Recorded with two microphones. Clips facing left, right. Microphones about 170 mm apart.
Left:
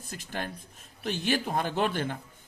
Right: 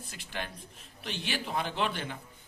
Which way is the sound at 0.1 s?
45° left (ahead or behind).